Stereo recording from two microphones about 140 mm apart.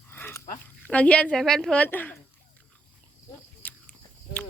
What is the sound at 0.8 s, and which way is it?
Speech, 10° left (ahead or behind).